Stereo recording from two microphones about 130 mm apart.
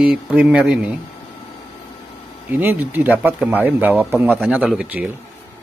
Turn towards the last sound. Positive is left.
turn(degrees=-10)  # may be behind; listen again after turning